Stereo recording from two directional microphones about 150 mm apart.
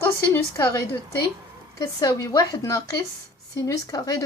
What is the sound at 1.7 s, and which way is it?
Speech, 25° left (ahead or behind).